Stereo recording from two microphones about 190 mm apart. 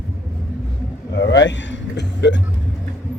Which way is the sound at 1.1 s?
65° left (ahead or behind).